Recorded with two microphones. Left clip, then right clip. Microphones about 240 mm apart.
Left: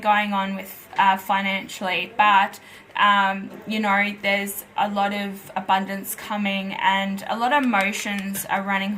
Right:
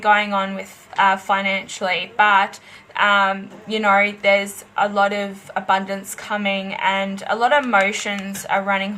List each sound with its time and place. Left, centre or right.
0.0 s a woman's voice: right